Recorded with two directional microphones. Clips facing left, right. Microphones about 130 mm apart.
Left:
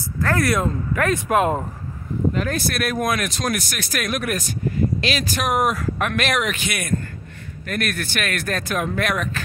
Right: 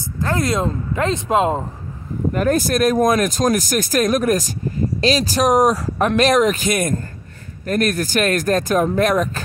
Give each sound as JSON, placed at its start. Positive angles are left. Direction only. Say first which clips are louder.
{"t": 0.2, "sound": "speech", "louder": "right 1 dB", "side_deg": -20}
{"t": 2.3, "sound": "speech", "louder": "right 6 dB", "side_deg": -45}